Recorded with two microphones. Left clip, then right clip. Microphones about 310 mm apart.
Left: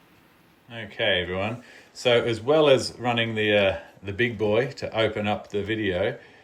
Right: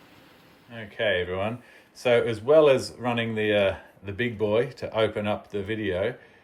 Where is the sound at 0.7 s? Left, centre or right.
Centre.